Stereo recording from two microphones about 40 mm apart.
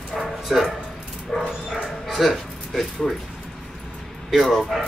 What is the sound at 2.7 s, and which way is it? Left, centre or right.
Speech, centre.